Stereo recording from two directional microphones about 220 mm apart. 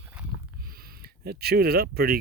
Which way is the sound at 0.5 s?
45° right (ahead or behind).